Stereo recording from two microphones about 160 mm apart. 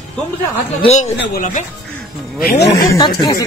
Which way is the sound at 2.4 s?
80° left.